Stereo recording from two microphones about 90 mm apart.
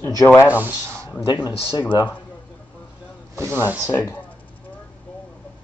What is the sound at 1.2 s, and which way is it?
Speech, 50° left (ahead or behind).